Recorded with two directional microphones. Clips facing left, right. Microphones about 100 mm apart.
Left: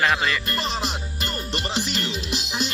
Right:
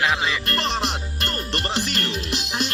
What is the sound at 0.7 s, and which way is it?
Music, 55° right (ahead or behind).